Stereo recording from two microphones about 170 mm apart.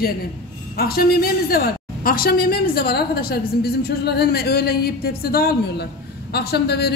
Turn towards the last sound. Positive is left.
turn(degrees=70)  # may be behind; listen again after turning